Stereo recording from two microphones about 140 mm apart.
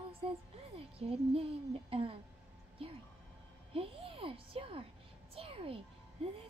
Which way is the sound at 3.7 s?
40° right (ahead or behind).